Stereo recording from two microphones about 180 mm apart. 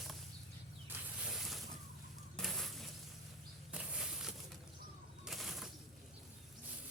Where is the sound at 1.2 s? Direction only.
Centre (ahead or behind).